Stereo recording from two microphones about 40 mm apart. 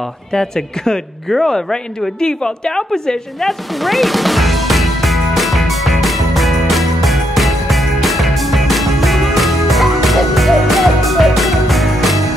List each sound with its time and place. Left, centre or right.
0.3 s a woman's voice: centre
3.3 s music: centre